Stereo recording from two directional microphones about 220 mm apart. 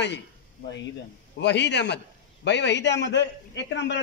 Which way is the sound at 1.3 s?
50° left (ahead or behind).